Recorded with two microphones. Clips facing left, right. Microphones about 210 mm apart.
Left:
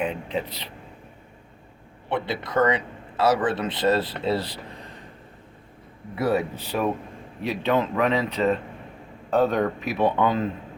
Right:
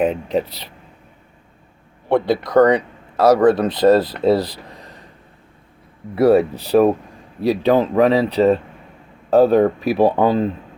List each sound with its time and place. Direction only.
0.0 s speech: 40° right (ahead or behind)
2.0 s speech: 40° right (ahead or behind)
6.1 s speech: 35° right (ahead or behind)